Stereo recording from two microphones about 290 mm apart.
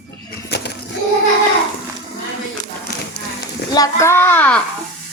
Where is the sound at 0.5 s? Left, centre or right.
Left.